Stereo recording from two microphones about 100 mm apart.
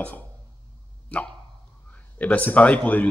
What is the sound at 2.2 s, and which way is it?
Speech, 15° left (ahead or behind).